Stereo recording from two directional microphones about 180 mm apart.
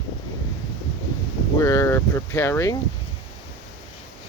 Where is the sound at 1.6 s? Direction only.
20° left (ahead or behind).